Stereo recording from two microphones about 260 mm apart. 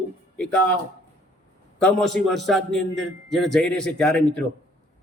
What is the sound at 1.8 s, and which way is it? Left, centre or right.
A man's voice, centre.